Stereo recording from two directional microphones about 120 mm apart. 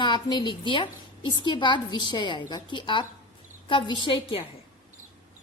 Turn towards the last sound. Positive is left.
turn(degrees=40)  # may be behind; listen again after turning